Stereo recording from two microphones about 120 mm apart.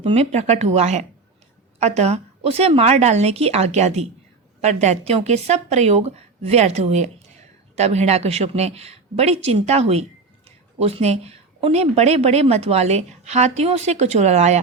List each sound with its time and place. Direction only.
0.1 s a woman's voice: 65° right (ahead or behind)